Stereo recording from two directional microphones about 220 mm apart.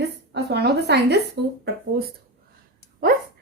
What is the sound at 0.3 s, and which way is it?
Speech, 50° right (ahead or behind).